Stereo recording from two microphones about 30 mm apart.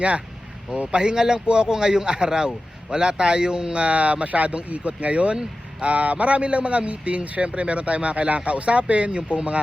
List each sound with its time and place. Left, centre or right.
0.9 s a man's voice: right
3.8 s speech: right